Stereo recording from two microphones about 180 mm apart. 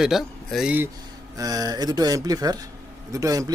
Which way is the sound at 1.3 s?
20° right (ahead or behind).